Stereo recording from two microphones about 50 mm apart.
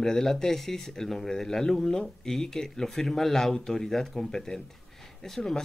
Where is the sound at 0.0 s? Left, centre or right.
Centre.